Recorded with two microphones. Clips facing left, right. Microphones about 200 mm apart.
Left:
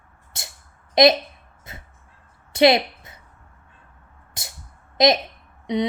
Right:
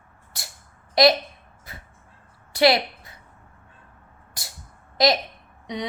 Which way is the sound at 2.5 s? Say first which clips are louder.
Left 3 dB; 20° left (ahead or behind).